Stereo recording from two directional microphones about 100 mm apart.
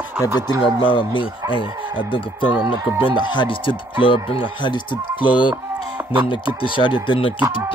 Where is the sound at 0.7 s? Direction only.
55° left (ahead or behind).